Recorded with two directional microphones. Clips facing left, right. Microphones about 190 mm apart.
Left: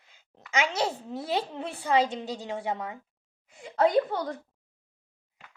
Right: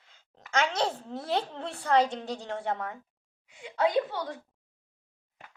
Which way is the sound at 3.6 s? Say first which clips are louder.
Left 3 dB; 45° left (ahead or behind).